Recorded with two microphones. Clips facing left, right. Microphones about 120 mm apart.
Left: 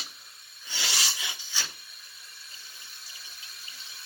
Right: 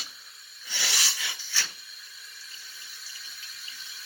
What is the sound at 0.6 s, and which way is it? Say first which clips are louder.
Rub: even; 15° left (ahead or behind).